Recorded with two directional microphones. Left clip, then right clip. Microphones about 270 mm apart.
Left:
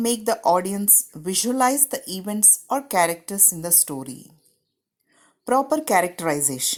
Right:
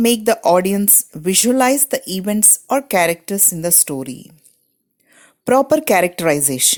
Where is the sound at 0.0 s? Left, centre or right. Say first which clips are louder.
Right 6 dB; right.